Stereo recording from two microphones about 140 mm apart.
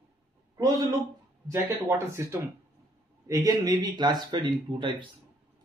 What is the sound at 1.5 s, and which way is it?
Speech, 20° right (ahead or behind).